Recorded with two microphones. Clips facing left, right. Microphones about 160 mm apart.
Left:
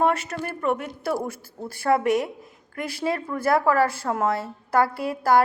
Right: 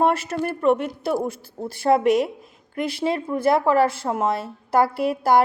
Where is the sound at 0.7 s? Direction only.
20° right (ahead or behind).